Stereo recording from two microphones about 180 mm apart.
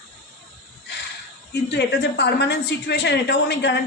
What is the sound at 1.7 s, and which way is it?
A woman's voice, 65° left (ahead or behind).